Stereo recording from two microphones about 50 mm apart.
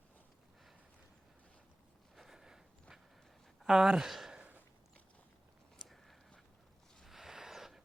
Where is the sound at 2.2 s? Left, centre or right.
Centre.